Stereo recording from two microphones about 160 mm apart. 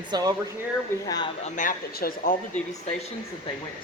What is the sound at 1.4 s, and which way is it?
Speech, 50° left (ahead or behind).